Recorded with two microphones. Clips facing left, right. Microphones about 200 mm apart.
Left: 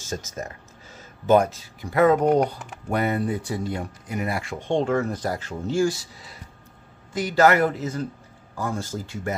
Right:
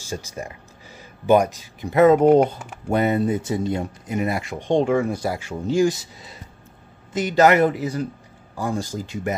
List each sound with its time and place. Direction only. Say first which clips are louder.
0.0 s speech: right 1 dB; 15° right (ahead or behind)